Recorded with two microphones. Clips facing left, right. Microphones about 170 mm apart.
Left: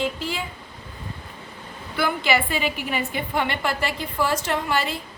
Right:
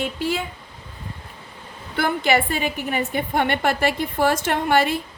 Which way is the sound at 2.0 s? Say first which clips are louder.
Right 3 dB; 50° right (ahead or behind).